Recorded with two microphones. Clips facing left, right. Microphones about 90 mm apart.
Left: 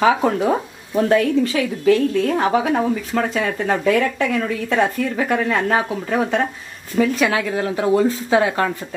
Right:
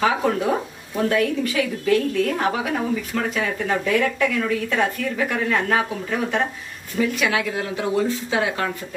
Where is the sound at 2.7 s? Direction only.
40° left (ahead or behind).